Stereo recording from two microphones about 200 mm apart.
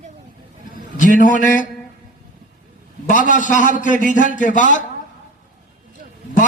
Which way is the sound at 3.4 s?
40° left (ahead or behind).